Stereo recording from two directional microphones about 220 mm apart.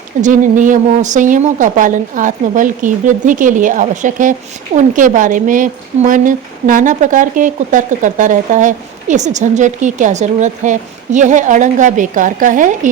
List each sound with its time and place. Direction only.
0.2 s speech: 35° right (ahead or behind)